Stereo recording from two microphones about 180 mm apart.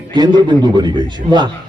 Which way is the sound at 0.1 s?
25° right (ahead or behind).